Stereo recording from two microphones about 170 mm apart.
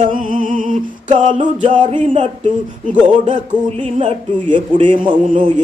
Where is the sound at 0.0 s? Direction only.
50° right (ahead or behind).